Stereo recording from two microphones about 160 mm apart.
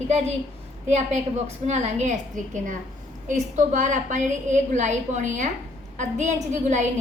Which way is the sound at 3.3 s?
50° right (ahead or behind).